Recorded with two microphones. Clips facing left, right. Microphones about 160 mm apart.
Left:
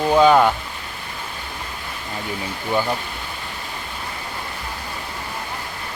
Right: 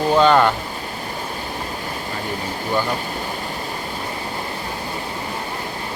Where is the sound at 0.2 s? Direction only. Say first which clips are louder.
Left 1 dB; 5° left (ahead or behind).